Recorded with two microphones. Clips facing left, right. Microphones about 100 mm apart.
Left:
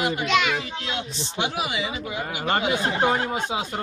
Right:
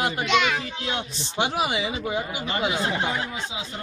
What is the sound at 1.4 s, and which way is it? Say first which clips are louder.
Speech: right 3 dB; 35° right (ahead or behind).